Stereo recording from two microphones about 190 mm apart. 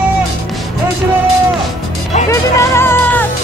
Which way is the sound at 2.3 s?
15° left (ahead or behind).